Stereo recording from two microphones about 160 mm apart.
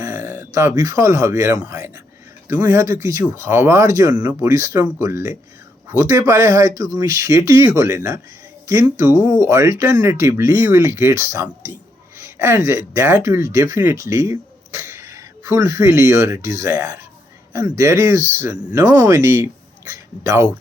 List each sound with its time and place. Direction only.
0.0 s speech: 15° right (ahead or behind)